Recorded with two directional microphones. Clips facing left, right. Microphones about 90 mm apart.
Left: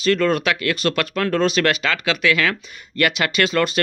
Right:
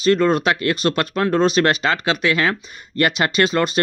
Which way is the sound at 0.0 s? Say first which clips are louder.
Right 2 dB; 25° right (ahead or behind).